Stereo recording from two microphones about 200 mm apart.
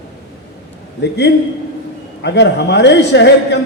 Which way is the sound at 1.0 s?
55° left (ahead or behind).